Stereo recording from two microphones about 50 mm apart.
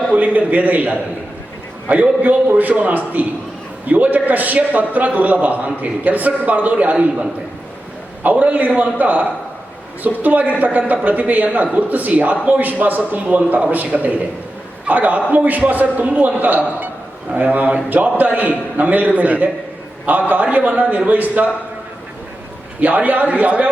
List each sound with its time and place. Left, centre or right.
0.1 s a man's voice: right
1.9 s a man's voice: right
8.2 s a man's voice: right
10.2 s a man's voice: right
22.8 s a man's voice: right